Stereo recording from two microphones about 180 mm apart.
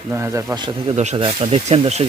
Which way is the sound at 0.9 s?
35° right (ahead or behind).